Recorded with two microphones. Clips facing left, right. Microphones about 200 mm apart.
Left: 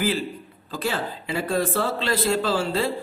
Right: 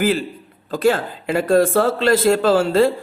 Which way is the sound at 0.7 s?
50° right (ahead or behind).